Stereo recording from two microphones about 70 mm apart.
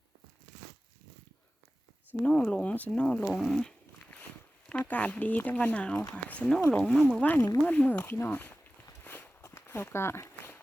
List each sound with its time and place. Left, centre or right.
2.2 s speech: centre
3.2 s speech: centre
4.7 s speech: left
9.0 s walk: left
9.4 s walk: left